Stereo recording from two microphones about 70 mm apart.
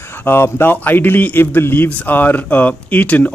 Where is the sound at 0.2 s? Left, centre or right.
Left.